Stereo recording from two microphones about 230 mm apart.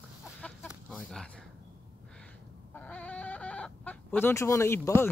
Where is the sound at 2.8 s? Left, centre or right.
Centre.